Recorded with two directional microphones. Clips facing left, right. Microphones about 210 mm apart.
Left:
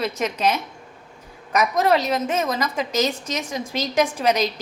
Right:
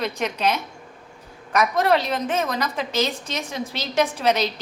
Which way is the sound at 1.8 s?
5° left (ahead or behind).